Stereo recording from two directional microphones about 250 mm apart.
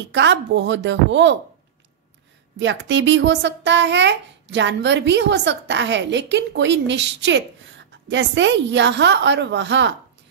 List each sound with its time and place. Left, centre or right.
0.1 s a child's voice: right
2.6 s a child's voice: right